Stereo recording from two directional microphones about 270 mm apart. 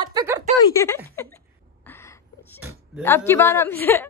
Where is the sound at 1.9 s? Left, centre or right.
Centre.